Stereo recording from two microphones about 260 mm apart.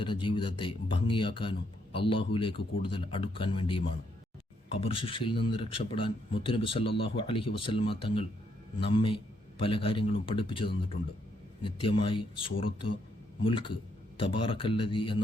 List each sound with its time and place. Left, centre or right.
0.0 s speech: centre